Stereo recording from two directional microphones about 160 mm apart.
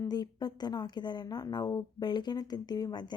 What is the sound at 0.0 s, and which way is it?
A woman's voice, 25° left (ahead or behind).